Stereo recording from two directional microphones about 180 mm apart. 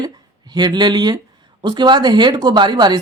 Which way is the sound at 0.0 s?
25° right (ahead or behind).